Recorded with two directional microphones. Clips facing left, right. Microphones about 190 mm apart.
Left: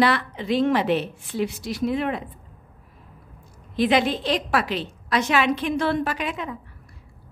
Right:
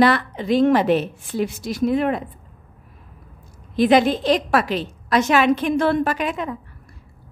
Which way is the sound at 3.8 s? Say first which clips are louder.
Right 5 dB; 45° right (ahead or behind).